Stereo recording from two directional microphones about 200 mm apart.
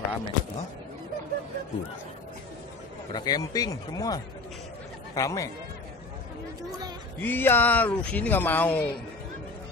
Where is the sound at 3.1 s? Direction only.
20° left (ahead or behind).